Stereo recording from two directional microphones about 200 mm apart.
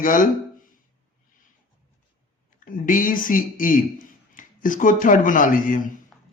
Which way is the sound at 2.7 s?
40° left (ahead or behind).